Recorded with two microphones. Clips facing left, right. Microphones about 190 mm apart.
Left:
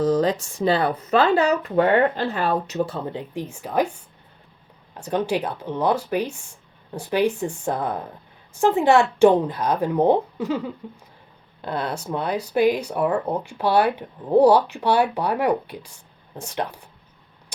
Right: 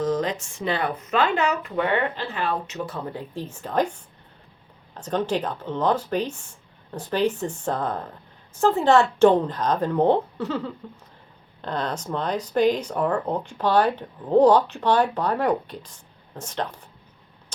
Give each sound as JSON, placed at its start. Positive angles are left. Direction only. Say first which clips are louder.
{"t": 0.0, "sound": "speech", "louder": "left 4 dB", "side_deg": 35}